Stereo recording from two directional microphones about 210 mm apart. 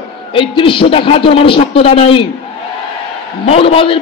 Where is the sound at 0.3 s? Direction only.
25° left (ahead or behind).